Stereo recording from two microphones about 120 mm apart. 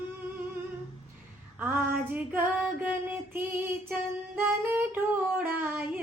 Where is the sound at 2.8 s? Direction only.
15° right (ahead or behind).